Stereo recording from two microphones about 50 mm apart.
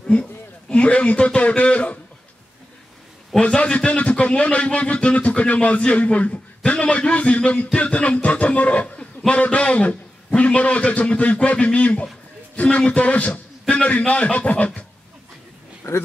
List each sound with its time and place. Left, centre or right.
0.0 s a man's voice: centre
3.3 s speech: left
15.8 s speech: left